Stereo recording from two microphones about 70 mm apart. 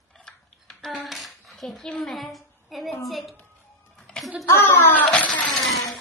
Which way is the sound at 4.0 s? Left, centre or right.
Centre.